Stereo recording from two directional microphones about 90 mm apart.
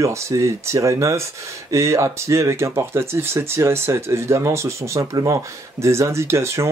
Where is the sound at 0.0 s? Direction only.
35° right (ahead or behind).